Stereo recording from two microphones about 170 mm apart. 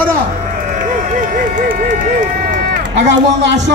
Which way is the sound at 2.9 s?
90° right.